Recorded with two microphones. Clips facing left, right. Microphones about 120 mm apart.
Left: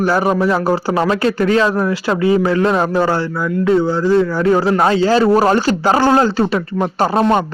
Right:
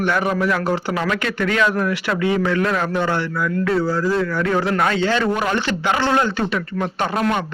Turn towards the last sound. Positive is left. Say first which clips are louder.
# left 6 dB
turn(degrees=35)  # may be behind; listen again after turning